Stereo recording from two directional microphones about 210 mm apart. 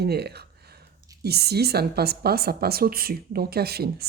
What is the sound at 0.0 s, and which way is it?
A woman's voice, 50° right (ahead or behind).